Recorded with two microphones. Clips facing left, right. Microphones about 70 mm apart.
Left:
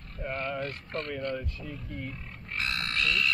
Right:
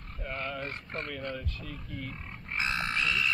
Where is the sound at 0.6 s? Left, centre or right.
Right.